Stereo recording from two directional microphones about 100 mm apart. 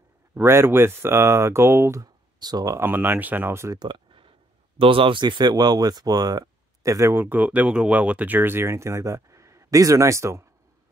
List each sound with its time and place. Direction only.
0.3 s speech: 25° right (ahead or behind)
2.4 s speech: 35° right (ahead or behind)
2.8 s speech: 20° right (ahead or behind)
3.7 s a sound: 50° right (ahead or behind)
4.7 s speech: 65° right (ahead or behind); by 10.4 s 30° right (ahead or behind)